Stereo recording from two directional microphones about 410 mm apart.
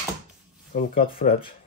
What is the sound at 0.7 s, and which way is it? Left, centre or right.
Speech, centre.